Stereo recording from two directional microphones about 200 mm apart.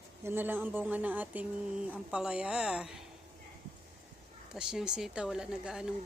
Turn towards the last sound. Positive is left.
turn(degrees=-5)  # may be behind; listen again after turning